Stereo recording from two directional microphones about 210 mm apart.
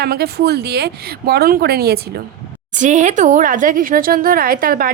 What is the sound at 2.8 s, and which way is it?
A woman's voice, 35° right (ahead or behind).